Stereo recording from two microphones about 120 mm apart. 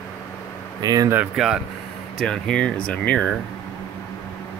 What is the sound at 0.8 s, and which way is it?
Speech, 35° right (ahead or behind).